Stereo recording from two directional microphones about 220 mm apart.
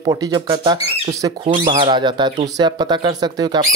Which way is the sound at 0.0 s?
20° right (ahead or behind).